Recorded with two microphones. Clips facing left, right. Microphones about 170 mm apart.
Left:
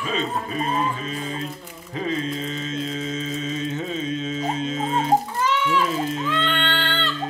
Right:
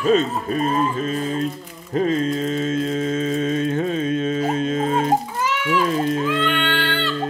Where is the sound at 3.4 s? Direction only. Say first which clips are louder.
Right 7 dB; 55° right (ahead or behind).